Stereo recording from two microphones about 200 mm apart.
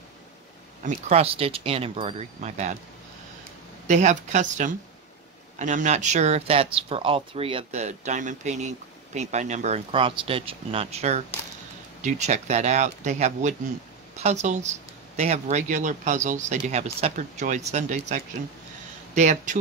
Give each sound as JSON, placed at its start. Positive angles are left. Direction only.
{"t": 0.8, "sound": "speech", "side_deg": -35}
{"t": 3.8, "sound": "speech", "side_deg": -35}